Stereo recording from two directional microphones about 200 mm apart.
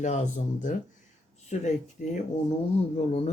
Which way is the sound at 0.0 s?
35° left (ahead or behind).